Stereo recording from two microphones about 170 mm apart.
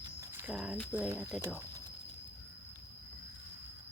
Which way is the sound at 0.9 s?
10° right (ahead or behind).